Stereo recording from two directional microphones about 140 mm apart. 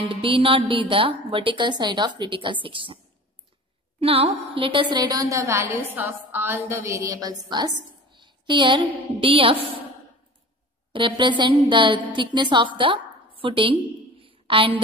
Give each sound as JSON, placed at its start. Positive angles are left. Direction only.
{"t": 0.0, "sound": "a woman's voice", "side_deg": -40}
{"t": 4.0, "sound": "a woman's voice", "side_deg": -45}
{"t": 10.9, "sound": "a woman's voice", "side_deg": -35}
{"t": 14.2, "sound": "a sound", "side_deg": -40}